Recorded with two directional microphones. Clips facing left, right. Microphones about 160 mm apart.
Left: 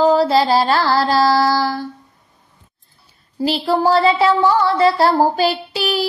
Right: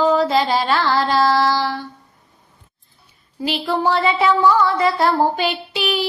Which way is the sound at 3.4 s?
35° left (ahead or behind).